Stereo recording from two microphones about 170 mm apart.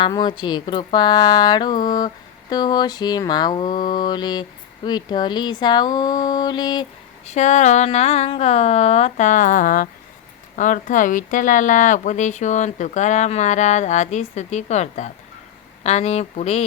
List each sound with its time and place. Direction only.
0.0 s speech: 25° left (ahead or behind)
7.3 s a woman's voice: 45° left (ahead or behind)